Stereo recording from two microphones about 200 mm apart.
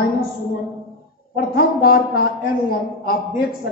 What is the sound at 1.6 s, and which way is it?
A man's voice, 45° left (ahead or behind).